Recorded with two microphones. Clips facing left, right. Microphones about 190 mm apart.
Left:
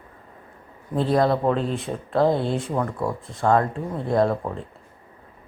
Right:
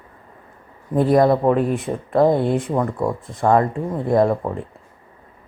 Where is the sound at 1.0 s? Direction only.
20° right (ahead or behind).